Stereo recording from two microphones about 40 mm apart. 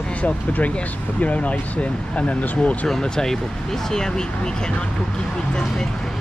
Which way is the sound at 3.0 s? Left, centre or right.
Centre.